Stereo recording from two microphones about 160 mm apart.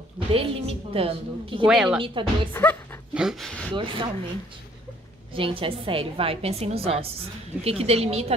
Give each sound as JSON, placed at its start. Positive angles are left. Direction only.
{"t": 0.3, "sound": "a woman's voice", "side_deg": -35}
{"t": 1.7, "sound": "speech", "side_deg": -5}
{"t": 2.0, "sound": "a woman's voice", "side_deg": -30}
{"t": 2.5, "sound": "speech", "side_deg": 10}
{"t": 3.2, "sound": "speech", "side_deg": 0}
{"t": 3.7, "sound": "a woman's voice", "side_deg": -30}
{"t": 5.3, "sound": "a woman's voice", "side_deg": -35}